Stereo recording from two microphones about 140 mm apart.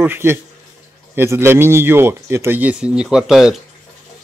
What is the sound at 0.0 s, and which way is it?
Speech, 15° right (ahead or behind).